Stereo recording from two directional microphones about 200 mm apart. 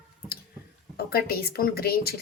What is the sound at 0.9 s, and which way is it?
A woman's voice, 50° left (ahead or behind).